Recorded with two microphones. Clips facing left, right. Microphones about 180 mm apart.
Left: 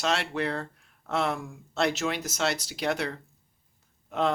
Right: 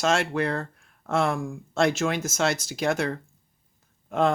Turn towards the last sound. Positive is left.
turn(degrees=-50)  # may be behind; listen again after turning